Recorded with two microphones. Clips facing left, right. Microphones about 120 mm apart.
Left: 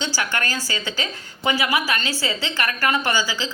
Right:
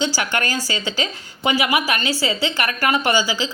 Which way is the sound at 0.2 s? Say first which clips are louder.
Right 3 dB; 15° right (ahead or behind).